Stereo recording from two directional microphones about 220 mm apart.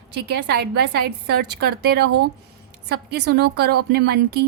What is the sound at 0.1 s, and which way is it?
A woman's voice, 50° right (ahead or behind).